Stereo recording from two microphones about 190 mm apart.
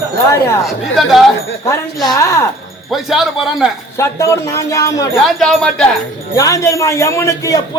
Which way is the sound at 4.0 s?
15° left (ahead or behind).